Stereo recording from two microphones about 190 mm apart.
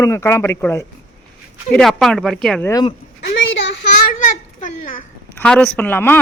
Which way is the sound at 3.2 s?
70° left (ahead or behind).